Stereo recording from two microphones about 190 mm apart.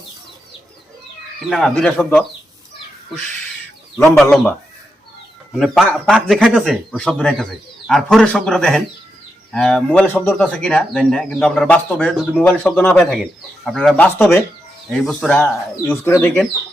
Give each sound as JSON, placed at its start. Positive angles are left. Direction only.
{"t": 1.5, "sound": "speech", "side_deg": 5}
{"t": 4.0, "sound": "speech", "side_deg": 5}